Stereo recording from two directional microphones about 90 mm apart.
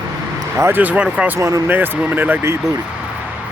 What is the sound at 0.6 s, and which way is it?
Speech, 25° right (ahead or behind).